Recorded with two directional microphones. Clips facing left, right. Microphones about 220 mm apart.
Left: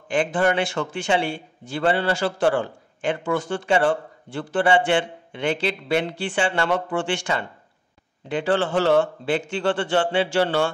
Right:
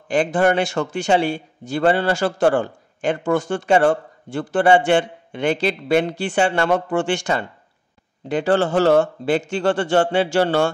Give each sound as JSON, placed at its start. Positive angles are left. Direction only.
{"t": 0.1, "sound": "speech", "side_deg": -40}